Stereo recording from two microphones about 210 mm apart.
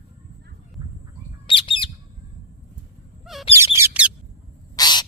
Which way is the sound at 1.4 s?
25° left (ahead or behind).